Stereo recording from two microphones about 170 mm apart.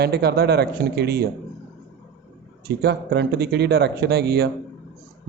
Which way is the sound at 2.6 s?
75° right (ahead or behind).